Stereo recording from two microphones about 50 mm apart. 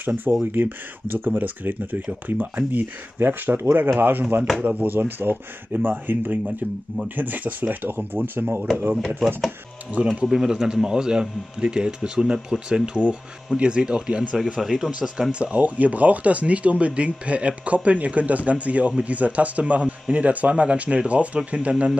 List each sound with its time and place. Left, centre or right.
0.0 s speech: right
10.2 s speech: centre
14.6 s speech: centre
15.3 s speech: right